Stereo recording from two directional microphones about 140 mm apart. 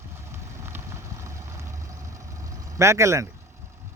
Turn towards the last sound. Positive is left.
turn(degrees=-20)  # may be behind; listen again after turning